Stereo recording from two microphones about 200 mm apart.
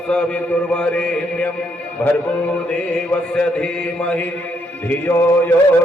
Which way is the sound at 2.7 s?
5° left (ahead or behind).